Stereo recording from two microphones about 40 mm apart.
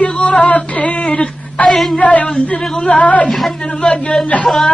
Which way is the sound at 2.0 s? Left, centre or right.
Left.